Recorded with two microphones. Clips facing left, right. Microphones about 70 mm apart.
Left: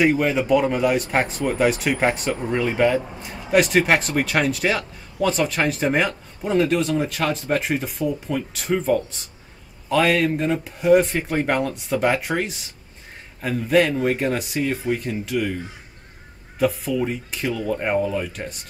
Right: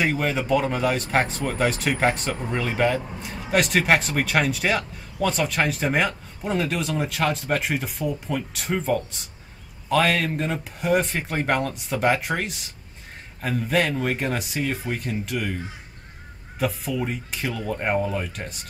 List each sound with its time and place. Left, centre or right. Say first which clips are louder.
0.0 s speech: left 5 dB; centre
16.5 s speech: left 5 dB; centre